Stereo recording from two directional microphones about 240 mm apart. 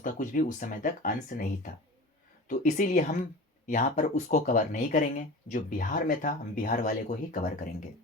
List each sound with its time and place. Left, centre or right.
0.0 s speech: left